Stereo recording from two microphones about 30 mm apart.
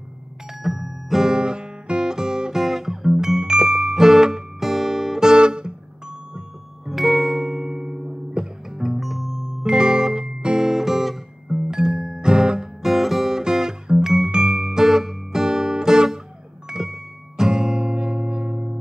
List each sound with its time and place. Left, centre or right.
0.6 s music: centre
1.3 s guitar: right; by 3.2 s centre
3.2 s music: right
5.2 s music: right
6.9 s music: centre; by 8.5 s right
8.6 s music: centre
9.6 s music: right; by 11.1 s centre
11.4 s music: right
12.8 s music: centre
13.4 s guitar: right
14.3 s music: right
17.5 s music: right